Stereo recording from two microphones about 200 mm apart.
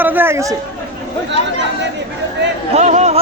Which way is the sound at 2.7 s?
35° right (ahead or behind).